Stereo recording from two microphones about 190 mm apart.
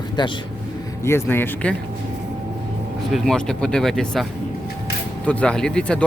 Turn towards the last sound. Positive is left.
turn(degrees=5)  # may be behind; listen again after turning